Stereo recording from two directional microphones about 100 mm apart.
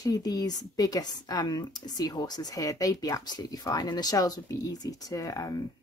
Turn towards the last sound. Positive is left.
turn(degrees=35)  # may be behind; listen again after turning